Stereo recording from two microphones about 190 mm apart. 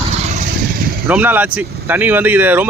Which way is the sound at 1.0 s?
10° right (ahead or behind).